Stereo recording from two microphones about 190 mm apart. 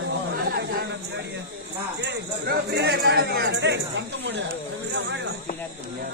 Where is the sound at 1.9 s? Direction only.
60° right (ahead or behind).